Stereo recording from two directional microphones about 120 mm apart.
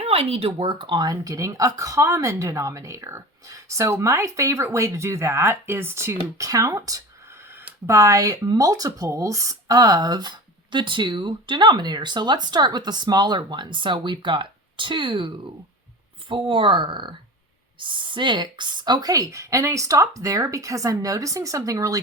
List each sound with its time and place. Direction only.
0.0 s speech: 55° right (ahead or behind)
16.3 s speech: 45° right (ahead or behind); by 22.0 s 30° right (ahead or behind)